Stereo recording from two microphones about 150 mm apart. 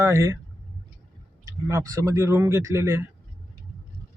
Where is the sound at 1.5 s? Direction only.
20° right (ahead or behind).